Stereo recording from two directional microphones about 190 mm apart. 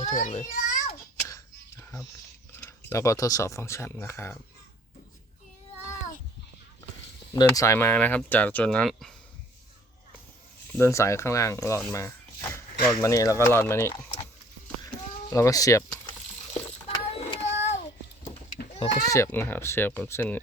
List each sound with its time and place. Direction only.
0.0 s a child's voice: 40° left (ahead or behind)
2.6 s speech: 15° left (ahead or behind)
7.3 s speech: 15° left (ahead or behind)
10.8 s speech: 15° left (ahead or behind)
14.8 s a sound: 20° left (ahead or behind)
16.6 s child singing: 30° left (ahead or behind)
18.7 s a sound: 30° left (ahead or behind)
19.0 s speech: 15° left (ahead or behind)